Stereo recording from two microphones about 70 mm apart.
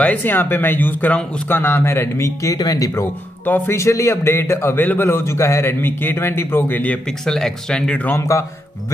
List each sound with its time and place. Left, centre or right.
0.0 s speech: left
1.5 s a man's voice: left
2.2 s speech: left
3.4 s speech: left
3.7 s a man's voice: left
7.1 s speech: centre
8.2 s a man's voice: left